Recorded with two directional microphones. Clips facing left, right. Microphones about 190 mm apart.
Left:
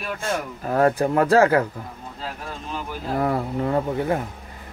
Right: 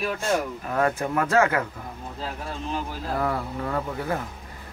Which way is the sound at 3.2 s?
25° left (ahead or behind).